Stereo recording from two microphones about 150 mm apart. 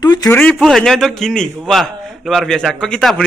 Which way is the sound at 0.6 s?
Centre (ahead or behind).